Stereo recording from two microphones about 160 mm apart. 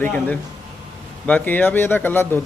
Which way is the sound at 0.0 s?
10° left (ahead or behind).